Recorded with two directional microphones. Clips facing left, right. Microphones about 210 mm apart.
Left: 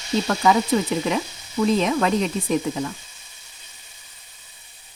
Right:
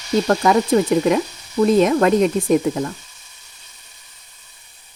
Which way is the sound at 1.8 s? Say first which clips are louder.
Right 6 dB; 50° right (ahead or behind).